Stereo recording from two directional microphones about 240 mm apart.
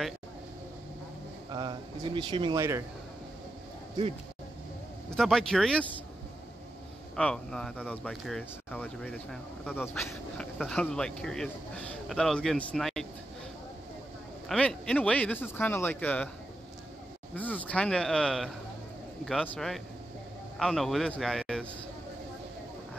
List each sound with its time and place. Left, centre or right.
1.5 s speech: centre
5.1 s speech: centre
7.2 s speech: centre
14.5 s speech: centre
17.4 s a man's voice: centre